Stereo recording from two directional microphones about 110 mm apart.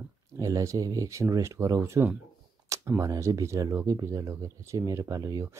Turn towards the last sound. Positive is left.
turn(degrees=-30)  # may be behind; listen again after turning